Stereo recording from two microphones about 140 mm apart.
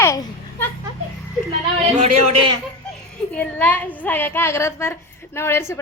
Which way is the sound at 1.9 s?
50° right (ahead or behind).